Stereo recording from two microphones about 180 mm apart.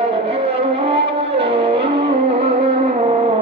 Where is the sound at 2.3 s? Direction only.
35° right (ahead or behind).